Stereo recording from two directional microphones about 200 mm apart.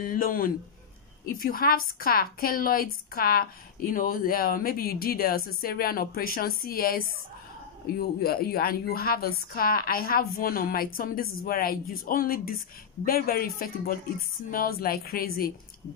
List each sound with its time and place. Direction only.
0.0 s a woman's voice: 45° left (ahead or behind)